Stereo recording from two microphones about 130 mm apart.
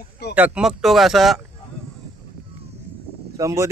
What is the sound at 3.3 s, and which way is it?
Speech, 25° right (ahead or behind).